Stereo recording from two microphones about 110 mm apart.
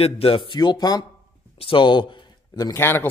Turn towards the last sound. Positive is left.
turn(degrees=20)  # may be behind; listen again after turning